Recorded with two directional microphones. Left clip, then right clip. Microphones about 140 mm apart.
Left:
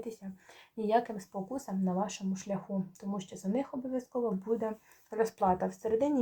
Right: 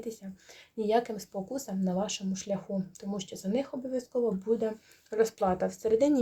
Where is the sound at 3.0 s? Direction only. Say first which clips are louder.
Right 2 dB; 30° right (ahead or behind).